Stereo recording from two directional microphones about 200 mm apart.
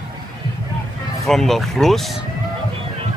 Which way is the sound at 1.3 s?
Centre (ahead or behind).